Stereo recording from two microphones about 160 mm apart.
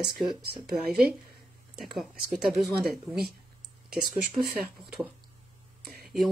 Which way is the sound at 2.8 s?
75° right (ahead or behind).